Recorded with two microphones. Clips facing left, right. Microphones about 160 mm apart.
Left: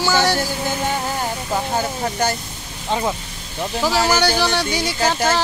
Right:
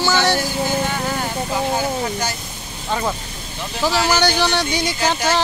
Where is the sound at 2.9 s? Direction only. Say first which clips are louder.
Left 1 dB; 20° left (ahead or behind).